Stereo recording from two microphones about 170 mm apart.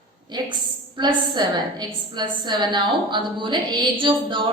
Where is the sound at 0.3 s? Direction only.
25° right (ahead or behind).